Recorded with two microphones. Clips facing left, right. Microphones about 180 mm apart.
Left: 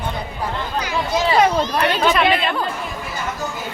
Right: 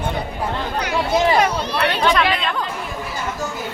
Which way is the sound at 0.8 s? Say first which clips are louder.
Right 3 dB; 60° right (ahead or behind).